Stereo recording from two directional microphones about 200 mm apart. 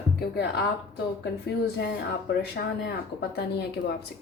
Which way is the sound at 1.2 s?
55° left (ahead or behind).